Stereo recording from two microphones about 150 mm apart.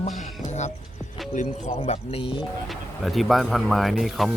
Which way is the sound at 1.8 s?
40° left (ahead or behind).